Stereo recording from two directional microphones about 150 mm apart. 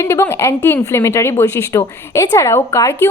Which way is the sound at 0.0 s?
20° left (ahead or behind).